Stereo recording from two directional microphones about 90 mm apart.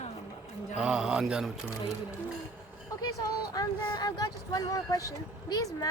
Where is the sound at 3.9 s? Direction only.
50° left (ahead or behind).